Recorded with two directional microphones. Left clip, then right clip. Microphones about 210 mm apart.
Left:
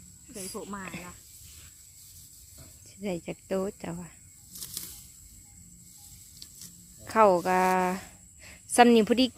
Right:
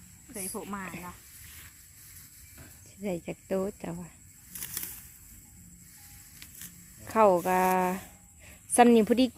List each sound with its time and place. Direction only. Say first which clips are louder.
0.3 s speech: right 1 dB; 20° right (ahead or behind)
2.8 s speech: even; centre (ahead or behind)
7.0 s speech: left 1 dB; centre (ahead or behind)